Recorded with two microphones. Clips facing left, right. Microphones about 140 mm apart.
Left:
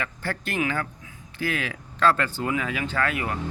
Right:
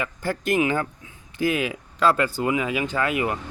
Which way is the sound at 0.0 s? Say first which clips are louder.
Right 4 dB; 15° right (ahead or behind).